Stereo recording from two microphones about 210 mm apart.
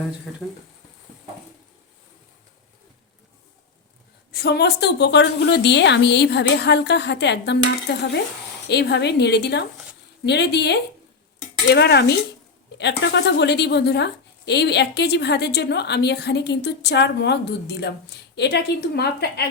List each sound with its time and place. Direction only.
4.3 s speech: 50° left (ahead or behind)